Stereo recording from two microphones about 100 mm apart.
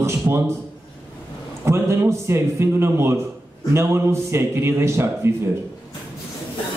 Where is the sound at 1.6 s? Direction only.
25° right (ahead or behind).